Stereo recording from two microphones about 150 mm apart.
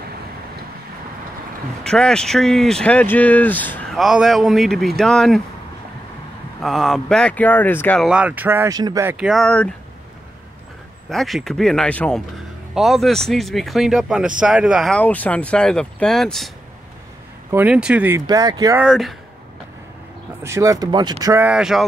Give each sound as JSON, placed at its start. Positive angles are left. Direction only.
{"t": 1.8, "sound": "speech", "side_deg": 5}
{"t": 3.9, "sound": "speech", "side_deg": 0}
{"t": 6.6, "sound": "speech", "side_deg": 0}
{"t": 8.0, "sound": "speech", "side_deg": -5}
{"t": 9.2, "sound": "speech", "side_deg": 0}
{"t": 11.1, "sound": "speech", "side_deg": 0}
{"t": 15.0, "sound": "speech", "side_deg": 10}
{"t": 17.5, "sound": "speech", "side_deg": -10}
{"t": 18.2, "sound": "speech", "side_deg": -25}
{"t": 18.8, "sound": "speech", "side_deg": -5}
{"t": 20.4, "sound": "speech", "side_deg": -20}
{"t": 21.5, "sound": "speech", "side_deg": -5}